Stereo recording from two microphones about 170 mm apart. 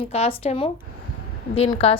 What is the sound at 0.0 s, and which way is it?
A woman's voice, 35° left (ahead or behind).